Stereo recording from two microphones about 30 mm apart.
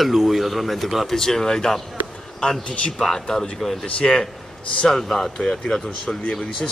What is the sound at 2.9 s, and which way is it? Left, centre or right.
A man's voice, centre.